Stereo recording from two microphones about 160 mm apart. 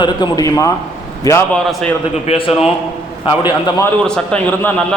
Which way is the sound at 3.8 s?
10° left (ahead or behind).